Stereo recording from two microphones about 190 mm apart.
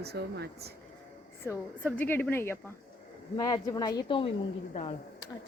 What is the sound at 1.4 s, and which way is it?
Speech, 10° left (ahead or behind).